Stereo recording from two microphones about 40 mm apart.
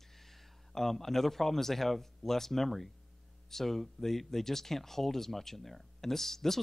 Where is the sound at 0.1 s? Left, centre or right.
Centre.